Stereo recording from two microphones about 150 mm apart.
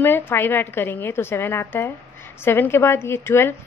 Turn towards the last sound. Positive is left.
turn(degrees=15)  # may be behind; listen again after turning